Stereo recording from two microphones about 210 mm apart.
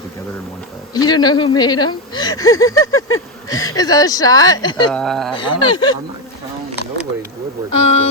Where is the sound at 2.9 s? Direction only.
80° left.